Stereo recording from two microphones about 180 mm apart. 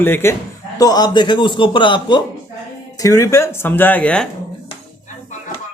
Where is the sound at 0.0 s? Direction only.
15° left (ahead or behind).